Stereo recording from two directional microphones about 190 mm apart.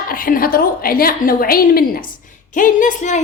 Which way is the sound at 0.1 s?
50° left (ahead or behind).